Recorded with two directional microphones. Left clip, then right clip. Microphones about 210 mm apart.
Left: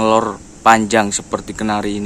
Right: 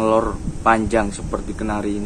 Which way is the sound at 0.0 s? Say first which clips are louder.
Left 3 dB; 45° left (ahead or behind).